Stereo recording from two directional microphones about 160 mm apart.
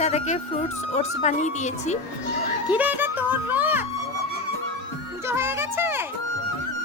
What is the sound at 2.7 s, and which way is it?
Speech, 10° right (ahead or behind).